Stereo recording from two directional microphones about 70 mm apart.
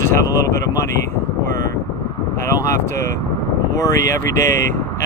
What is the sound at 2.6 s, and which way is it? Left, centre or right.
Speech, left.